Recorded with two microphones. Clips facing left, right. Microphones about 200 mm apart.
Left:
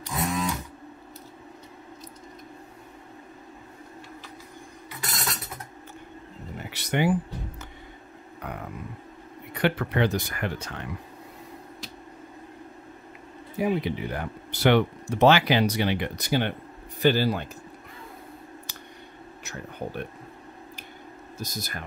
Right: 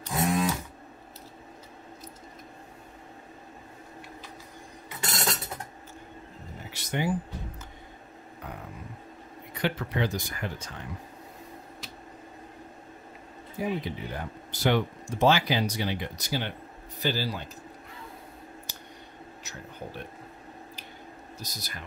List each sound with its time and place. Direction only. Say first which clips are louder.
0.1 s a sound: right 2 dB; 30° right (ahead or behind)
5.0 s cutlery: right 3 dB; 30° right (ahead or behind)
6.7 s music: left 5 dB; 70° left (ahead or behind)
8.4 s a sound: left 5 dB; 70° left (ahead or behind)
9.5 s speech: left 5 dB; 60° left (ahead or behind)
13.6 s speech: left 5 dB; 70° left (ahead or behind)
21.4 s speech: left 8 dB; 50° left (ahead or behind)